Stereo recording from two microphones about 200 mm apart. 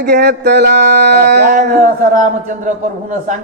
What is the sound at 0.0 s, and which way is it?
Speech, 55° right (ahead or behind).